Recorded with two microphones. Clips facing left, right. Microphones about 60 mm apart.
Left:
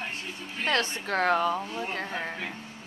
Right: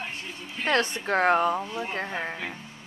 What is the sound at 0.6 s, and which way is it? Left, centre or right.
Speech, right.